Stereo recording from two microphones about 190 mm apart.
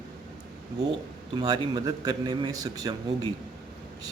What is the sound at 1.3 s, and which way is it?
A man's voice, 25° right (ahead or behind).